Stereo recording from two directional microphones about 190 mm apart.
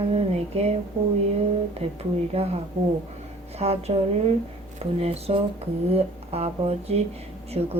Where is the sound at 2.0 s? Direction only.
35° right (ahead or behind).